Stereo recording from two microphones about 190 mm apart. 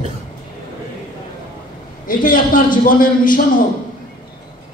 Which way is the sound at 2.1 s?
45° left (ahead or behind).